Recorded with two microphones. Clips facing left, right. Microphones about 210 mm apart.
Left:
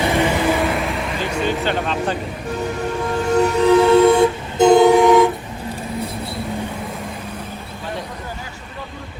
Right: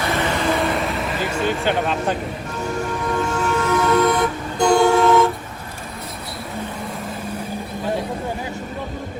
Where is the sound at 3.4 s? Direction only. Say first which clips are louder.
Left 9 dB; 30° left (ahead or behind); by 5.3 s 15° left (ahead or behind).